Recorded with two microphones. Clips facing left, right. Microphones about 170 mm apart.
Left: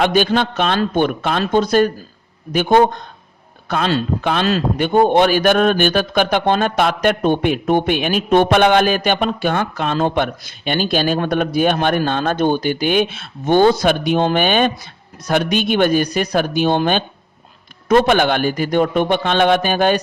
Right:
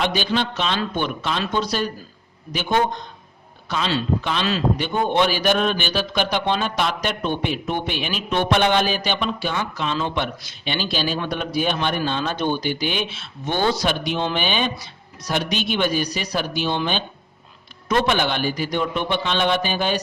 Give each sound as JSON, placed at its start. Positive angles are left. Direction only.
{"t": 0.0, "sound": "a man's voice", "side_deg": 50}